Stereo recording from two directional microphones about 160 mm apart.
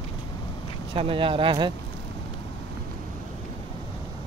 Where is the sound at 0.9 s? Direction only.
35° right (ahead or behind).